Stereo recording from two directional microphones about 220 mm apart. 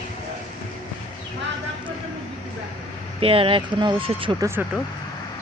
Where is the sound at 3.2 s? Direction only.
25° right (ahead or behind).